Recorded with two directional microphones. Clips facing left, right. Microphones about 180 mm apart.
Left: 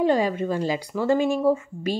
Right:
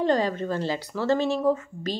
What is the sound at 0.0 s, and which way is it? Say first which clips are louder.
A woman's voice: left 2 dB; 10° left (ahead or behind).